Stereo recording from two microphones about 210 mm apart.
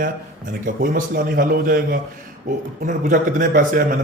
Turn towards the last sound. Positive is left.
turn(degrees=-40)  # may be behind; listen again after turning